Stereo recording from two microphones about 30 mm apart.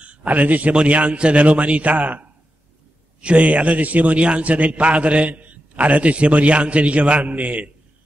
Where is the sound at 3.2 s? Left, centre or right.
Right.